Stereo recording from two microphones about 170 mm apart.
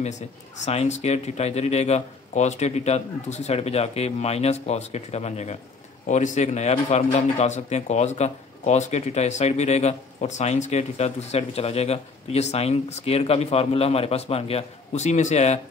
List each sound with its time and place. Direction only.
0.7 s speech: 40° left (ahead or behind)